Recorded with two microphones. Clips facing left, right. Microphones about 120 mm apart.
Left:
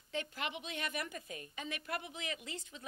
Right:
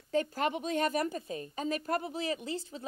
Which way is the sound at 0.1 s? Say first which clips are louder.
Right 10 dB; 40° right (ahead or behind).